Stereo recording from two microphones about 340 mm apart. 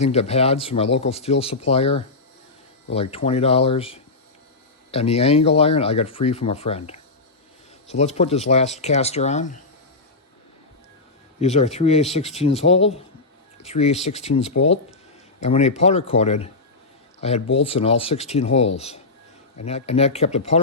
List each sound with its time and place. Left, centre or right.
0.0 s speech: centre
11.3 s speech: centre